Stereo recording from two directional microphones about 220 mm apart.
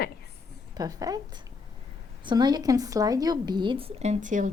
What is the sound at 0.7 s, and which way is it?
A woman's voice, 15° right (ahead or behind).